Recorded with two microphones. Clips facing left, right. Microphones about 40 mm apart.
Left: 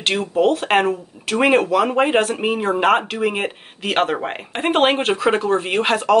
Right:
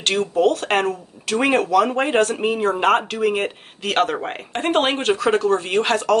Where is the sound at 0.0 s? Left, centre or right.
Centre.